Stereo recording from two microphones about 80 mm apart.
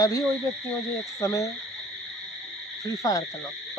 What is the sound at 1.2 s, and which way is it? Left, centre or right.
Speech, left.